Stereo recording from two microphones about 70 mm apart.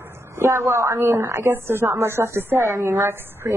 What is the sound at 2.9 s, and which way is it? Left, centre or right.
Speech, right.